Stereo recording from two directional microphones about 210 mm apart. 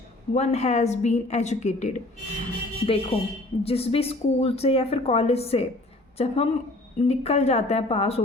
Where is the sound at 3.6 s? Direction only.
30° left (ahead or behind).